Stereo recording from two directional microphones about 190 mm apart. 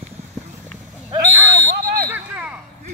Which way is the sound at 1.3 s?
10° right (ahead or behind).